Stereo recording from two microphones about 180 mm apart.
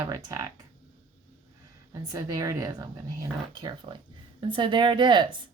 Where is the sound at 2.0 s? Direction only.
20° right (ahead or behind).